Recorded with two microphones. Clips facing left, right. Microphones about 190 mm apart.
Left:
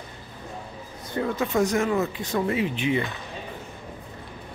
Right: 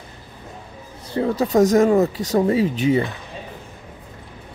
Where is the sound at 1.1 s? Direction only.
35° right (ahead or behind).